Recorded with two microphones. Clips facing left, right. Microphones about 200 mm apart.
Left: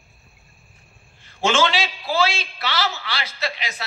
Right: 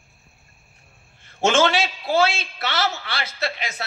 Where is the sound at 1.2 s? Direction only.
50° right (ahead or behind).